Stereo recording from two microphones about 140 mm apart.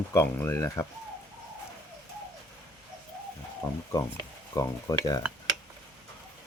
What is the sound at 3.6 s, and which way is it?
Speech, 25° left (ahead or behind).